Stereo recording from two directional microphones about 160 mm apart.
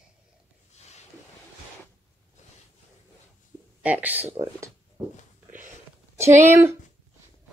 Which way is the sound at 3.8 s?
10° right (ahead or behind).